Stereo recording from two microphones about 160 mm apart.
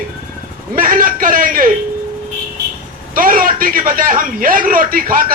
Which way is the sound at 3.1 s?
60° right (ahead or behind).